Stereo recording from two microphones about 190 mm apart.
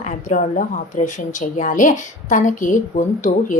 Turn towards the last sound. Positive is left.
turn(degrees=40)  # may be behind; listen again after turning